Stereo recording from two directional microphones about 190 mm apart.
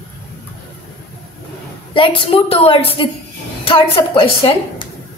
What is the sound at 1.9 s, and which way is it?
A woman's voice, 25° left (ahead or behind).